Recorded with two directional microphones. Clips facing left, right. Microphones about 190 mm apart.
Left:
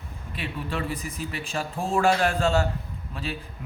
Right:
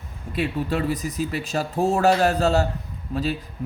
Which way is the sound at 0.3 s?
40° right (ahead or behind).